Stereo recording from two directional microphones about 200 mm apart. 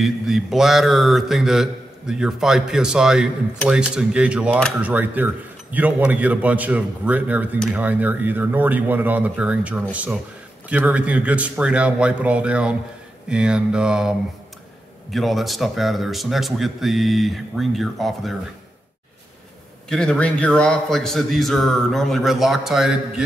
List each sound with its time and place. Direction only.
0.0 s a man's voice: centre (ahead or behind)
7.8 s a man's voice: 10° right (ahead or behind)
19.9 s speech: 5° left (ahead or behind)